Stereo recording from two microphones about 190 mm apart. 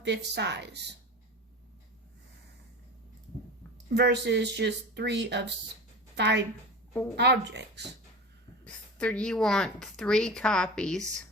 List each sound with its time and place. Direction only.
0.0 s speech: 65° right (ahead or behind)
3.8 s speech: 60° right (ahead or behind)
8.6 s a woman's voice: 5° left (ahead or behind)